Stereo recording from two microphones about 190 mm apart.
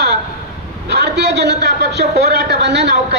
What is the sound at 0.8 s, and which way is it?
A man's voice, 65° right (ahead or behind).